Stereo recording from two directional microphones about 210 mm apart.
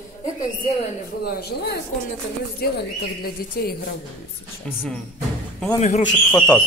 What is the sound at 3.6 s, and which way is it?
Speech, 45° left (ahead or behind).